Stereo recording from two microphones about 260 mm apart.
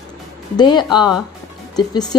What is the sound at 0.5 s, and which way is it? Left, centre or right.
Speech, centre.